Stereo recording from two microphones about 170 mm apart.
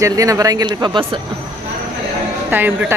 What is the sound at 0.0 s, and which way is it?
Speech, 20° right (ahead or behind).